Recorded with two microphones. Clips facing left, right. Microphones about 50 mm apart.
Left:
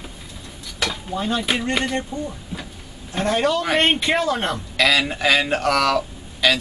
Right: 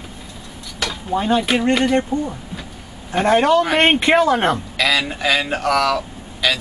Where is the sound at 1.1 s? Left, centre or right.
Right.